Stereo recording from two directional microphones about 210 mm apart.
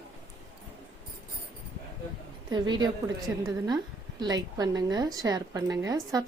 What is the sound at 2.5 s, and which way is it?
A woman's voice, 20° right (ahead or behind).